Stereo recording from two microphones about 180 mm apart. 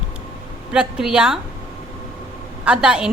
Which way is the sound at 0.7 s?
5° right (ahead or behind).